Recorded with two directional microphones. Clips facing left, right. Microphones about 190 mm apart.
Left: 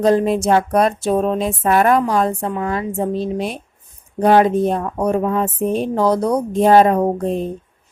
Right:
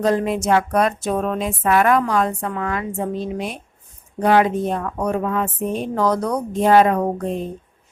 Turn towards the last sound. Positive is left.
turn(degrees=30)  # may be behind; listen again after turning